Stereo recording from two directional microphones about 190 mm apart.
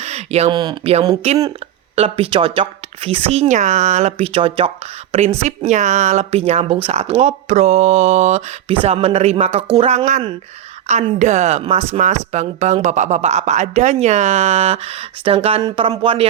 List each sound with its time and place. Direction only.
0.0 s speech: 35° right (ahead or behind)